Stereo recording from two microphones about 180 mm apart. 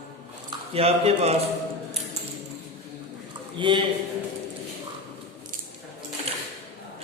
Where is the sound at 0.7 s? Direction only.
35° right (ahead or behind).